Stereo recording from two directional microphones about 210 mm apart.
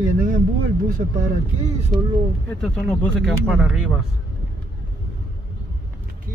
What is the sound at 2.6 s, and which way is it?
Speech, 5° left (ahead or behind).